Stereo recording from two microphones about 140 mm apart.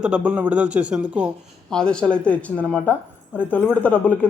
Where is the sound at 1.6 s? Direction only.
5° left (ahead or behind).